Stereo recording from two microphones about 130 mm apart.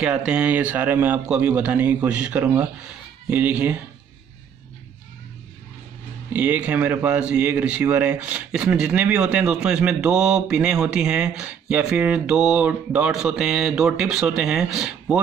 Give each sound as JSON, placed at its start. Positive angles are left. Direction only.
{"t": 0.0, "sound": "speech", "side_deg": -5}
{"t": 6.3, "sound": "speech", "side_deg": -10}